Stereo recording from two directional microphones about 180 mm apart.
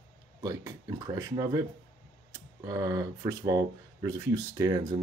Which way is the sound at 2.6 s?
20° right (ahead or behind).